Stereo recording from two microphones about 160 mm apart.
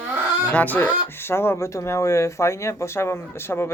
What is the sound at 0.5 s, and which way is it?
Speech, 10° left (ahead or behind).